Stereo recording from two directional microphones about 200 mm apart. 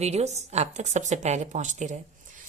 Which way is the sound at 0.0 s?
35° right (ahead or behind).